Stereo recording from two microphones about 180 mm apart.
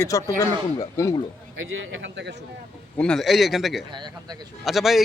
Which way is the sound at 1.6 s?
90° right.